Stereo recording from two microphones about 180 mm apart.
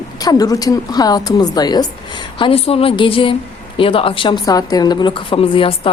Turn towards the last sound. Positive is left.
turn(degrees=30)  # may be behind; listen again after turning